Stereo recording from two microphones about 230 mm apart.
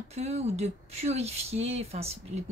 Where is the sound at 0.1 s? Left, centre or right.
Right.